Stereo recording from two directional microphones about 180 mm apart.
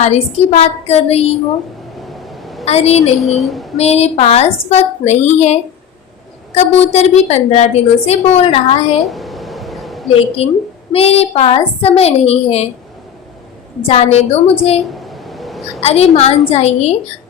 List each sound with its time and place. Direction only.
0.0 s a woman's voice: 40° left (ahead or behind)
2.0 s vehicle: centre (ahead or behind)
2.6 s a woman's voice: 35° left (ahead or behind)
3.2 s a sound: centre (ahead or behind)
3.8 s a woman's voice: 35° left (ahead or behind)
9.0 s a sound: centre (ahead or behind)
10.1 s a woman's voice: 35° left (ahead or behind)
13.8 s a woman's voice: 35° left (ahead or behind)
14.9 s a sound: centre (ahead or behind)
15.8 s a woman's voice: 35° left (ahead or behind)